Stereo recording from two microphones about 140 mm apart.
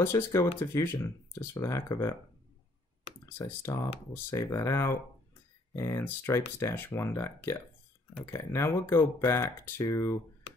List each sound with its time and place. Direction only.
0.0 s speech: 20° left (ahead or behind)
3.3 s speech: 20° left (ahead or behind)